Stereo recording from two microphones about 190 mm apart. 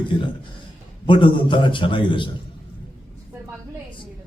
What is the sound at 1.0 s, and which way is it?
A man's voice, 25° left (ahead or behind).